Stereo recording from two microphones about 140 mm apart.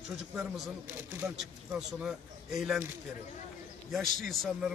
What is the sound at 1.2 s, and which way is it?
Speech, centre (ahead or behind).